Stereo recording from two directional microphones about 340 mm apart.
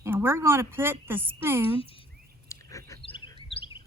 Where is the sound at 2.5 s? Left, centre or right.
Centre.